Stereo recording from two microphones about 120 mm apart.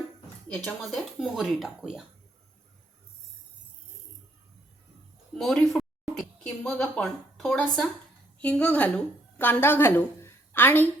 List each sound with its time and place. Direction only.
0.4 s speech: 10° left (ahead or behind)
5.3 s a woman's voice: 5° left (ahead or behind)